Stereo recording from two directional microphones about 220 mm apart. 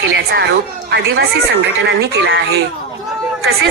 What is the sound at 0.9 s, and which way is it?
A woman's voice, 50° right (ahead or behind).